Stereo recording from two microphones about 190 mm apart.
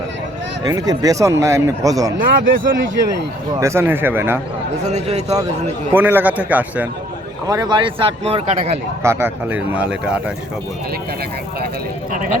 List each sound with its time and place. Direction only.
0.6 s speech: 20° right (ahead or behind)
2.1 s speech: 45° right (ahead or behind)
3.6 s speech: 15° right (ahead or behind)
4.9 s a man's voice: 35° right (ahead or behind)
5.9 s speech: 10° right (ahead or behind)
7.4 s speech: 20° right (ahead or behind)
9.0 s speech: 10° right (ahead or behind)